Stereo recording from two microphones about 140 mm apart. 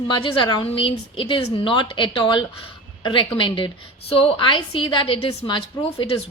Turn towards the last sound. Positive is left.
turn(degrees=40)  # may be behind; listen again after turning